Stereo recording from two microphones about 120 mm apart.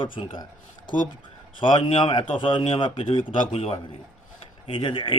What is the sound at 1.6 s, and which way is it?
A man's voice, 45° left (ahead or behind).